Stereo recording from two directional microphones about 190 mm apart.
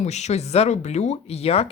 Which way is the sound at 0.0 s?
35° left (ahead or behind).